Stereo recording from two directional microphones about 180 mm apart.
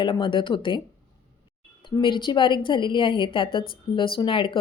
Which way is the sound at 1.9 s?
25° left (ahead or behind).